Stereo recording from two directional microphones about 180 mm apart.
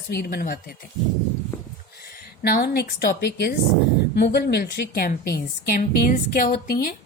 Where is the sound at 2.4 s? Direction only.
60° left (ahead or behind).